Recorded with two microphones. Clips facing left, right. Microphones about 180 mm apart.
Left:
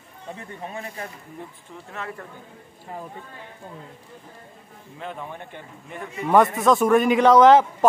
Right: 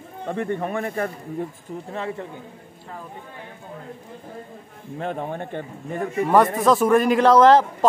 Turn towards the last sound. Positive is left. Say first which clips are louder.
# even
turn(degrees=0)  # may be behind; listen again after turning